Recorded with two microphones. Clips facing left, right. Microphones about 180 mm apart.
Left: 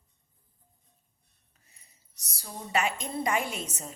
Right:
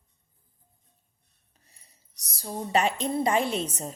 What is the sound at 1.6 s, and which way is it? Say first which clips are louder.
A woman's voice: right 2 dB; 35° right (ahead or behind).